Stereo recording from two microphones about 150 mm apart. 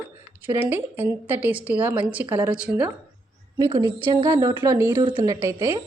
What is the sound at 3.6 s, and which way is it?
A woman's voice, 25° right (ahead or behind).